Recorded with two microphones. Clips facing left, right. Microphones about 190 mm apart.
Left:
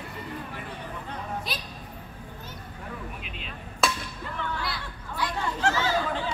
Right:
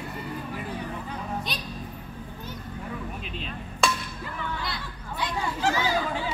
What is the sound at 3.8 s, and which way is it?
Music, 5° left (ahead or behind).